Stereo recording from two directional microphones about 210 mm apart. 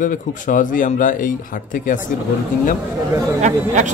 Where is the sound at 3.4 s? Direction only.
35° right (ahead or behind).